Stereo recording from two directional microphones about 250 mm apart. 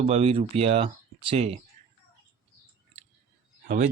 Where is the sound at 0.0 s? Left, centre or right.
Right.